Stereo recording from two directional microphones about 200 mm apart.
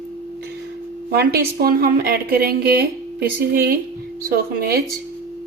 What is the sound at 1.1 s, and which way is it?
Speech, 50° right (ahead or behind).